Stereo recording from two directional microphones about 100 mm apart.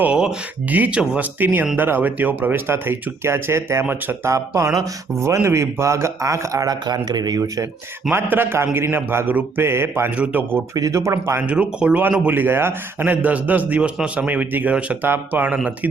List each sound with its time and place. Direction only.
0.0 s speech: 10° right (ahead or behind); by 7.7 s 35° right (ahead or behind)
8.1 s speech: 20° right (ahead or behind)
10.8 s speech: 35° right (ahead or behind)
11.4 s speech: 10° right (ahead or behind)